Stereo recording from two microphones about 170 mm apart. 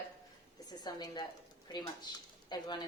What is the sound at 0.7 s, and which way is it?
Speech, 25° left (ahead or behind).